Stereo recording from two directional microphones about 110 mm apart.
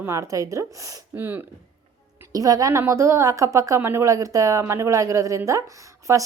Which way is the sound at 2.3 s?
35° right (ahead or behind).